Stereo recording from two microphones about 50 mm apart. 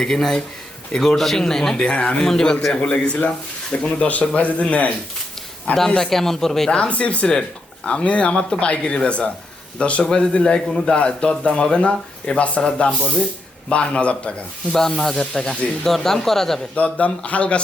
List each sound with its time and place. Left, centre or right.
0.0 s speech: centre
1.8 s a man's voice: left
2.2 s a man's voice: centre; by 4.9 s left
6.0 s speech: centre
6.7 s a man's voice: left
14.7 s speech: centre
16.7 s a man's voice: left